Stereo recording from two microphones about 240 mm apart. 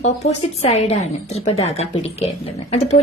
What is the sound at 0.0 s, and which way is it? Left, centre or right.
A woman's voice, left.